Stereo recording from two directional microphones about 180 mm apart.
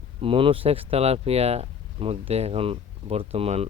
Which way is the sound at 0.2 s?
30° right (ahead or behind).